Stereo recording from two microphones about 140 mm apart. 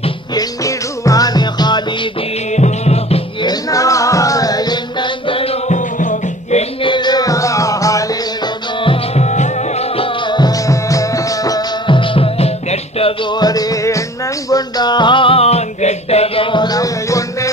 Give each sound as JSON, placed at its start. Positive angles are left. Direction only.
{"t": 0.3, "sound": "music", "side_deg": 25}
{"t": 2.5, "sound": "music", "side_deg": 55}
{"t": 3.4, "sound": "music", "side_deg": 25}
{"t": 5.8, "sound": "music", "side_deg": 65}
{"t": 6.8, "sound": "music", "side_deg": 35}
{"t": 8.8, "sound": "music", "side_deg": 50}